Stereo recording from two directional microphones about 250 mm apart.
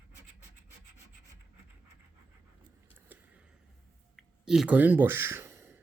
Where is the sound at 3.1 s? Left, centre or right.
Centre.